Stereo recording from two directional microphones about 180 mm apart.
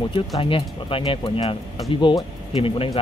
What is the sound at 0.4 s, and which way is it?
Speech, 30° left (ahead or behind).